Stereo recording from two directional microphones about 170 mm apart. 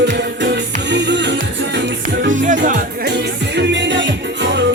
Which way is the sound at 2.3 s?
50° right (ahead or behind).